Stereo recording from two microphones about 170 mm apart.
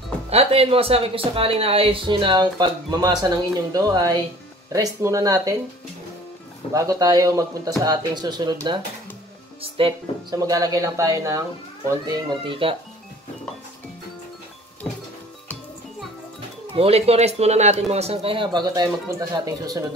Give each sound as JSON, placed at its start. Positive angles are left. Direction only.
{"t": 0.3, "sound": "speech", "side_deg": -35}
{"t": 6.7, "sound": "speech", "side_deg": -20}
{"t": 16.7, "sound": "speech", "side_deg": -35}